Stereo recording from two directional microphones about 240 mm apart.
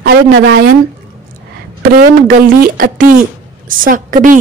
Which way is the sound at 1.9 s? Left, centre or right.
Right.